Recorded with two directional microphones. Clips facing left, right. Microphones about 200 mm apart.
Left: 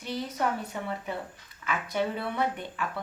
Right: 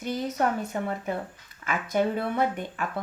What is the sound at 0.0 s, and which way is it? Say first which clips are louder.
Speech: right 4 dB; 45° right (ahead or behind).